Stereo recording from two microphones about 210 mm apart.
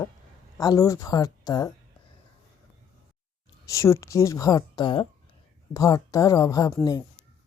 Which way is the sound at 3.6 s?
15° left (ahead or behind).